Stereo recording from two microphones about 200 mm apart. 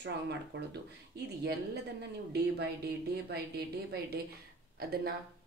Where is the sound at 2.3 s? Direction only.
55° right (ahead or behind).